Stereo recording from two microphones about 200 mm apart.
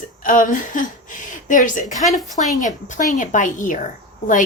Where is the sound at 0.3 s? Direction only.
40° left (ahead or behind).